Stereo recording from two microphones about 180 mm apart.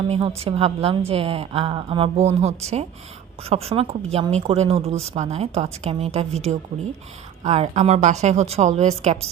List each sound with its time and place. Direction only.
0.1 s a woman's voice: 35° right (ahead or behind)